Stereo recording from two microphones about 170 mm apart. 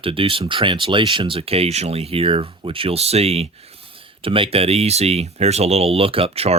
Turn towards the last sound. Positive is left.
turn(degrees=-35)  # may be behind; listen again after turning